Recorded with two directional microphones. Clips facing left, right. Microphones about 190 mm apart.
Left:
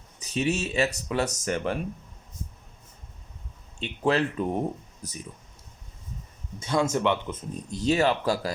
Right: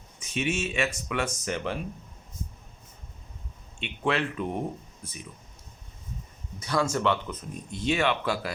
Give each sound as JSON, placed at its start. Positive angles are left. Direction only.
{"t": 0.2, "sound": "speech", "side_deg": 35}
{"t": 3.8, "sound": "speech", "side_deg": 40}
{"t": 6.6, "sound": "speech", "side_deg": 20}
{"t": 7.7, "sound": "speech", "side_deg": 40}